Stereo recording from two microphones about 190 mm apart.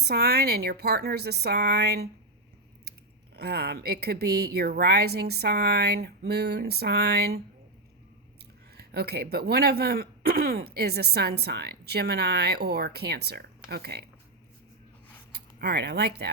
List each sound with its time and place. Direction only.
0.0 s speech: 55° right (ahead or behind)
3.3 s speech: 60° right (ahead or behind)
8.7 s speech: 55° right (ahead or behind)
15.3 s speech: 60° right (ahead or behind)